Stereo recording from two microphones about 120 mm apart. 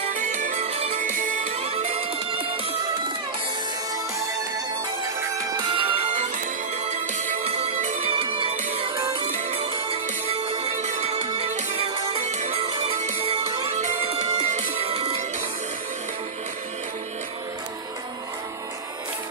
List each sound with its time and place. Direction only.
0.1 s music: 90° right
0.7 s music: 55° right (ahead or behind)
1.0 s music: 90° right
1.7 s music: 60° right (ahead or behind)
5.2 s music: 25° right (ahead or behind)
5.7 s music: 45° right (ahead or behind)
6.8 s music: 80° right
7.4 s music: 55° right (ahead or behind)
9.2 s music: 60° right (ahead or behind)
10.8 s music: 60° right (ahead or behind)
12.3 s music: 75° right (ahead or behind)
12.5 s music: 50° right (ahead or behind)